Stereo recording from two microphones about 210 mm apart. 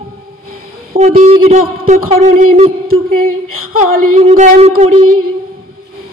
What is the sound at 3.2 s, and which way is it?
Speech, 90° right.